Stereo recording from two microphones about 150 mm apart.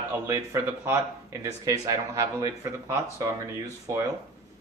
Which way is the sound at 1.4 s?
20° right (ahead or behind).